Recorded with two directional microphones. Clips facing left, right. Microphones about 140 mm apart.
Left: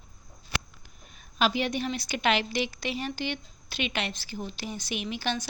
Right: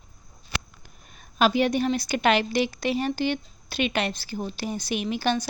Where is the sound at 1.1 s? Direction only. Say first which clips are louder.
Right 5 dB; 45° right (ahead or behind).